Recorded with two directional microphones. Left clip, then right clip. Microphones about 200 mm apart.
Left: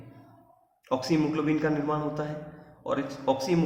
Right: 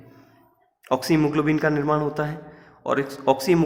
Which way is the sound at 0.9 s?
50° right (ahead or behind).